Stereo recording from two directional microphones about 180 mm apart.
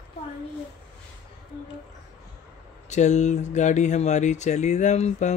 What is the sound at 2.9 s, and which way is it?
Speech, 40° left (ahead or behind).